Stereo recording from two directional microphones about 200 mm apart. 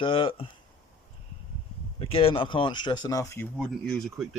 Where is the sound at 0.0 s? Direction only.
25° left (ahead or behind).